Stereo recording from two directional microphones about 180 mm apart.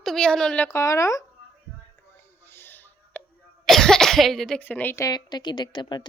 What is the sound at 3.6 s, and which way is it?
Speech, centre (ahead or behind).